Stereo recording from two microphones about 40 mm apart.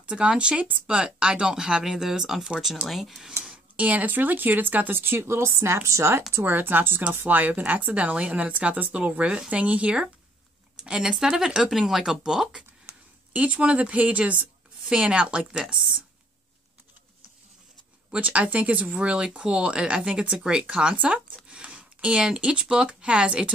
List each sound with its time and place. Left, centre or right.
0.0 s speech: right; by 3.3 s centre
3.7 s a woman's voice: right
4.1 s speech: right
4.9 s speech: right
6.4 s a woman's voice: right
10.8 s speech: centre
13.3 s a woman's voice: right
15.6 s speech: centre
18.1 s a woman's voice: right
18.9 s a woman's voice: right